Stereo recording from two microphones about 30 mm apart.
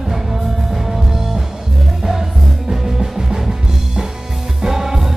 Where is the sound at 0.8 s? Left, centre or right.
Centre.